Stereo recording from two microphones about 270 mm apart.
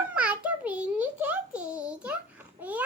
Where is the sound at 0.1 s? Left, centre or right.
Centre.